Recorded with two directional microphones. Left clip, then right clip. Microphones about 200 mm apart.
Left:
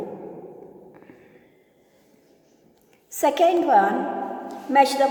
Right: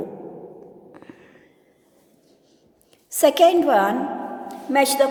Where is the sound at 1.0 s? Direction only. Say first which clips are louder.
Right 3 dB; 35° right (ahead or behind).